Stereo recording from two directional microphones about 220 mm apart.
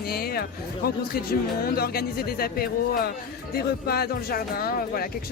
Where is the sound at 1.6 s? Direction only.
45° left (ahead or behind).